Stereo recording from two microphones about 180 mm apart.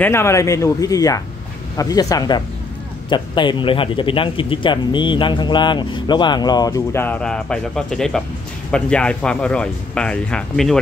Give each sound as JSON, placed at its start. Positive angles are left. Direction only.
{"t": 0.0, "sound": "a man's voice", "side_deg": 15}